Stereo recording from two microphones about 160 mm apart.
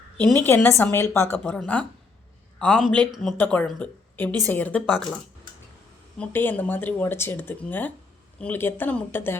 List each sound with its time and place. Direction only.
0.3 s speech: 15° left (ahead or behind)
6.1 s speech: 10° left (ahead or behind)